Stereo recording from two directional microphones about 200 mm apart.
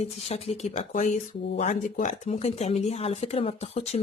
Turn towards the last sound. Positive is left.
turn(degrees=30)  # may be behind; listen again after turning